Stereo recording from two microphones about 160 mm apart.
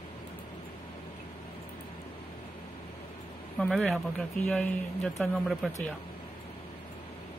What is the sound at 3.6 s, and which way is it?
Speech, 5° left (ahead or behind).